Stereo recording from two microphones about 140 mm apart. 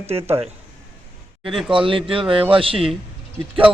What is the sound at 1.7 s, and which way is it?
A man's voice, 40° right (ahead or behind).